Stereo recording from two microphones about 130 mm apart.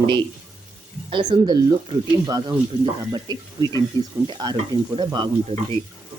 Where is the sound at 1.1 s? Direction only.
35° right (ahead or behind).